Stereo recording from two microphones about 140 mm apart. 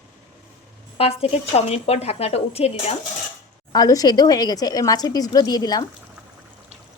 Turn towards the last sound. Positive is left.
turn(degrees=30)  # may be behind; listen again after turning